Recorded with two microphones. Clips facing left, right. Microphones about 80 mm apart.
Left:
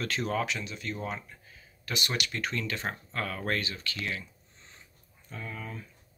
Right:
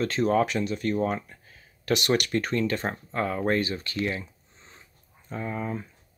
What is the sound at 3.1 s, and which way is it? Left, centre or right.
Speech, right.